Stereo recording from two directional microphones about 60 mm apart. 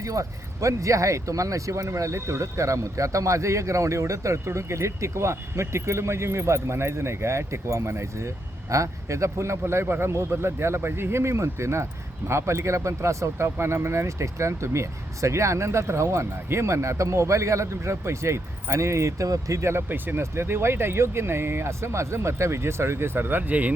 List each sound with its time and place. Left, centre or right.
0.0 s speech: right
19.9 s speech: right
20.3 s speech: right